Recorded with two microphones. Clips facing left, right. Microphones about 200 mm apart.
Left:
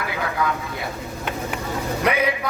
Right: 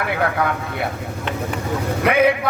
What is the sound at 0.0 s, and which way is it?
Speech, 60° right (ahead or behind).